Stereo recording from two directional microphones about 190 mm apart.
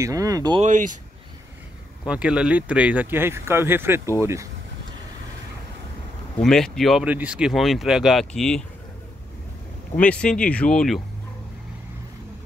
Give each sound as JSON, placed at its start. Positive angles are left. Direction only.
{"t": 0.0, "sound": "speech", "side_deg": -15}
{"t": 0.6, "sound": "speech", "side_deg": -40}
{"t": 2.0, "sound": "speech", "side_deg": -5}
{"t": 6.4, "sound": "speech", "side_deg": 5}
{"t": 9.9, "sound": "speech", "side_deg": 5}